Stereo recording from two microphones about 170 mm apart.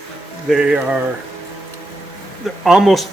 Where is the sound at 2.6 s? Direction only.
Centre (ahead or behind).